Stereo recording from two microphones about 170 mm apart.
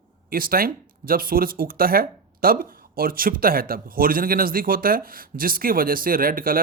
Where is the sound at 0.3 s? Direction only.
60° right (ahead or behind).